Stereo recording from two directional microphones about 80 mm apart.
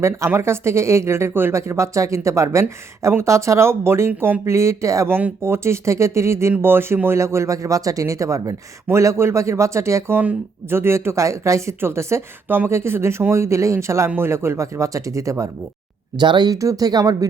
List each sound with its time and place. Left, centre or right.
0.3 s speech: right
5.0 s speech: right
16.1 s speech: right
16.5 s speech: right